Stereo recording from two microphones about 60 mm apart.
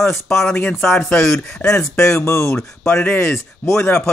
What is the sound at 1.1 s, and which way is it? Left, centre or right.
Speech, left.